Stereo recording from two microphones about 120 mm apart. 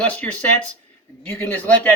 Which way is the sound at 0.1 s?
10° left (ahead or behind).